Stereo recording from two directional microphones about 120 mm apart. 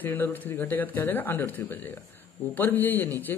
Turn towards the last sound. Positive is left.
turn(degrees=15)  # may be behind; listen again after turning